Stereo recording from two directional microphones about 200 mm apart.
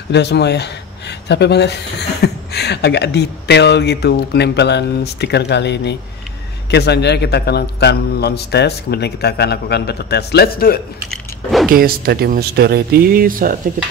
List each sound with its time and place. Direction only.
0.1 s a man's voice: 60° left (ahead or behind)
11.1 s a sound: centre (ahead or behind)
11.7 s speech: 50° right (ahead or behind)